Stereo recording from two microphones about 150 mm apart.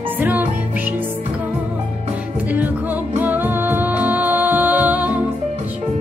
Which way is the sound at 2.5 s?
10° right (ahead or behind).